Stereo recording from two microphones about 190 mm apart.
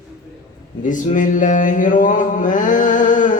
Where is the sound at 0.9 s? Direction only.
45° left (ahead or behind).